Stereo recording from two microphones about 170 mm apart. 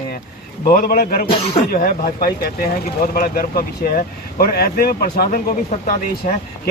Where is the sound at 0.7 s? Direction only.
55° left (ahead or behind).